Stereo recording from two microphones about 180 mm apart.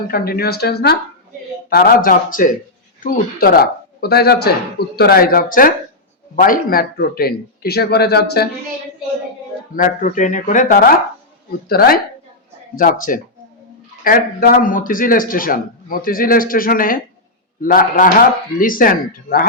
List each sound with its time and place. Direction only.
0.1 s a man's voice: 60° left (ahead or behind)
9.7 s a man's voice: 45° left (ahead or behind)